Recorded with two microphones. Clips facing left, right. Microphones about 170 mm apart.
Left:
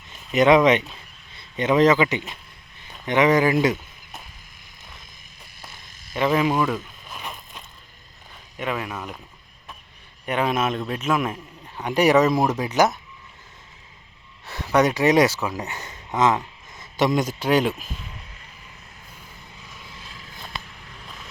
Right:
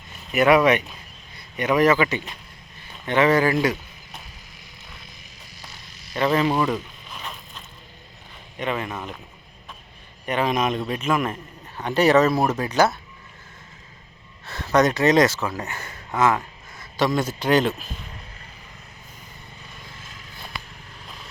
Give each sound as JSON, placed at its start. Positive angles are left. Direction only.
{"t": 0.3, "sound": "speech", "side_deg": 20}
{"t": 5.6, "sound": "insect", "side_deg": 50}
{"t": 6.1, "sound": "speech", "side_deg": 10}
{"t": 6.6, "sound": "a sound", "side_deg": 5}
{"t": 7.2, "sound": "vehicle", "side_deg": 15}
{"t": 8.5, "sound": "a man's voice", "side_deg": 5}
{"t": 10.2, "sound": "a man's voice", "side_deg": 5}
{"t": 14.4, "sound": "speech", "side_deg": 15}
{"t": 17.4, "sound": "speech", "side_deg": 10}